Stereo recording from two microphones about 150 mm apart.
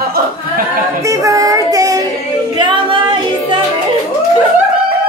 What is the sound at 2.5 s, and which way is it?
Music, 30° right (ahead or behind).